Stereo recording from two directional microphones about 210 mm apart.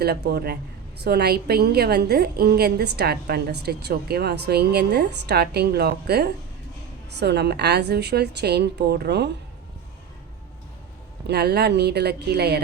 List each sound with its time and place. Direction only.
0.0 s a woman's voice: 50° right (ahead or behind)
11.3 s a woman's voice: 50° right (ahead or behind)